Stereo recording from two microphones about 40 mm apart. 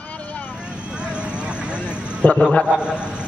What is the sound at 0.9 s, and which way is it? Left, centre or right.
Vehicle, right.